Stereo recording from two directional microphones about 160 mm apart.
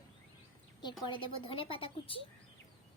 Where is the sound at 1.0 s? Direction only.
30° left (ahead or behind).